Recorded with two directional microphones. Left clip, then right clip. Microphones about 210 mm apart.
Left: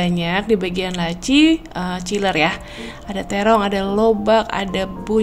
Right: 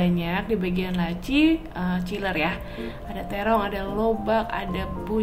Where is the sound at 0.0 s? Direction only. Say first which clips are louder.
Left 6 dB; 40° left (ahead or behind).